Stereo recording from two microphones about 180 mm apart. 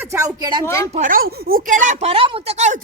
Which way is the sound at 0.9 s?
50° right (ahead or behind).